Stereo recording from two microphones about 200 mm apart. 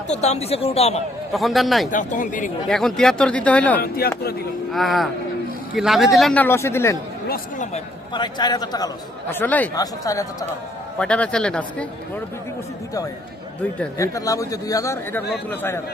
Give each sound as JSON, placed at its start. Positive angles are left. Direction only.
{"t": 0.1, "sound": "speech", "side_deg": 35}
{"t": 1.3, "sound": "speech", "side_deg": 0}
{"t": 1.9, "sound": "speech", "side_deg": 40}
{"t": 2.6, "sound": "speech", "side_deg": 5}
{"t": 3.8, "sound": "speech", "side_deg": 50}
{"t": 4.7, "sound": "speech", "side_deg": 0}
{"t": 7.3, "sound": "speech", "side_deg": 40}
{"t": 8.1, "sound": "a man's voice", "side_deg": 20}
{"t": 9.3, "sound": "speech", "side_deg": 10}
{"t": 10.9, "sound": "speech", "side_deg": 5}
{"t": 13.6, "sound": "speech", "side_deg": 10}